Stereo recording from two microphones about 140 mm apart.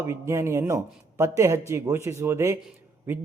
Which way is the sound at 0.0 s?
20° right (ahead or behind).